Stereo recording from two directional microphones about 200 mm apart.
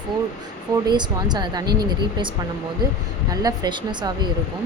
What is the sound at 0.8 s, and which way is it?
Speech, 20° right (ahead or behind).